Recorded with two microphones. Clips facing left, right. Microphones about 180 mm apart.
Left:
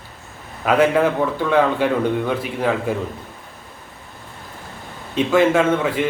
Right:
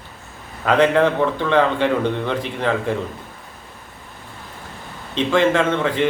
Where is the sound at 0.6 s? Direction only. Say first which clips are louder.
Even; 5° left (ahead or behind).